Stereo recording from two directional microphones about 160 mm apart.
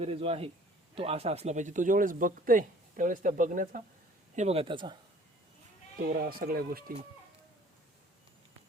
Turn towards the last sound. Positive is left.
turn(degrees=-65)  # may be behind; listen again after turning